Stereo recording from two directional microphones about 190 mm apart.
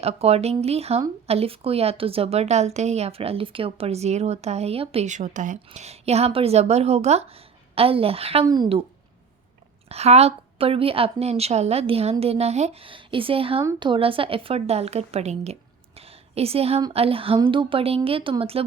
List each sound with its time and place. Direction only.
0.0 s a woman's voice: 30° right (ahead or behind)
9.9 s a woman's voice: 35° right (ahead or behind)
16.0 s a sound: 30° right (ahead or behind)
16.9 s speech: 30° right (ahead or behind)